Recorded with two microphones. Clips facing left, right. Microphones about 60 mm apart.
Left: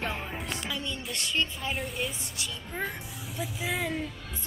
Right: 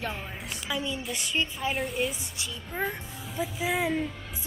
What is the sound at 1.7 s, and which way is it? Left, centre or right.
Speech, centre.